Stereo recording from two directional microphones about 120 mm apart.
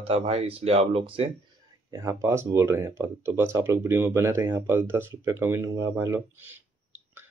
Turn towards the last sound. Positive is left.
turn(degrees=-25)  # may be behind; listen again after turning